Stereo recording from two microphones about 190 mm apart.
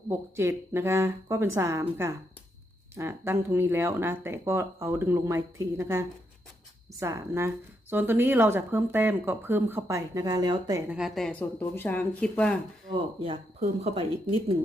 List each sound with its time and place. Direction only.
0.1 s speech: 15° right (ahead or behind)
10.8 s speech: 5° right (ahead or behind)
12.9 s speech: 30° right (ahead or behind)